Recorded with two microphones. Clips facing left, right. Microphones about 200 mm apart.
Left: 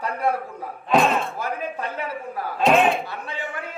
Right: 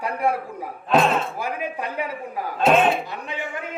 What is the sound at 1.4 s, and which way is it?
A man's voice, 15° right (ahead or behind).